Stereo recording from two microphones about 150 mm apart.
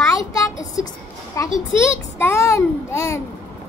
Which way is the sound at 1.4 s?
20° left (ahead or behind).